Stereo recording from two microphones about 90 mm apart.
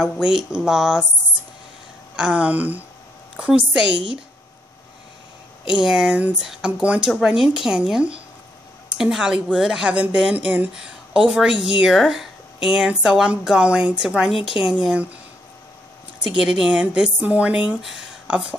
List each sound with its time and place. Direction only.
0.0 s speech: 5° right (ahead or behind)
2.1 s speech: 10° right (ahead or behind)
5.7 s speech: 10° right (ahead or behind)
14.5 s speech: 25° right (ahead or behind)
16.3 s speech: 10° right (ahead or behind)